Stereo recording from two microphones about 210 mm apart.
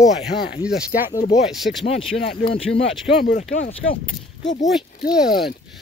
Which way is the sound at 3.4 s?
35° left (ahead or behind).